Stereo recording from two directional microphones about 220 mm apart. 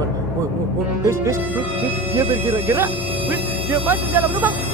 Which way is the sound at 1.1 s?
10° right (ahead or behind).